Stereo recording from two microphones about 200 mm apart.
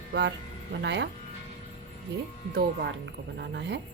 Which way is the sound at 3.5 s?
60° right (ahead or behind).